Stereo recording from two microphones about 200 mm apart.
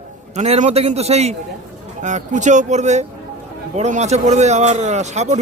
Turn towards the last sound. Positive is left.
turn(degrees=-35)  # may be behind; listen again after turning